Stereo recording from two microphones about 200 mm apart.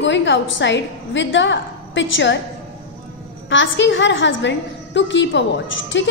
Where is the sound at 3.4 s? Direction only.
65° left (ahead or behind).